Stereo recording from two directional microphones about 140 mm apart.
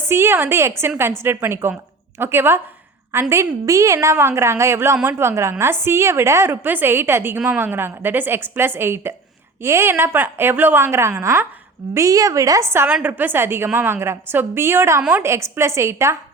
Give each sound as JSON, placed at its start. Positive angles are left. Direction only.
{"t": 0.1, "sound": "a woman's voice", "side_deg": -20}